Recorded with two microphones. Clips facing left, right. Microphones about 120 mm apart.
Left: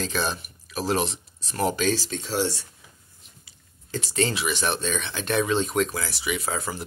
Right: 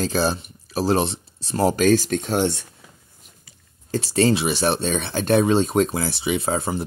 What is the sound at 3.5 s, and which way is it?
Speech, 35° right (ahead or behind).